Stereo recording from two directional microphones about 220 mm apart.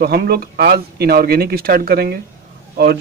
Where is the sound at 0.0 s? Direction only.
45° right (ahead or behind).